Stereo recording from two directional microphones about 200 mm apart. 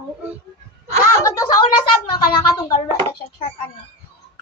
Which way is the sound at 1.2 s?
15° left (ahead or behind).